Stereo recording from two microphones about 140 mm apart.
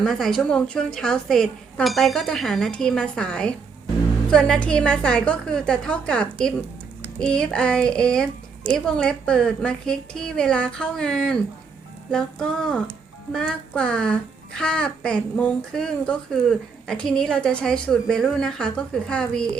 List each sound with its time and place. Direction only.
0.0 s a woman's voice: centre (ahead or behind)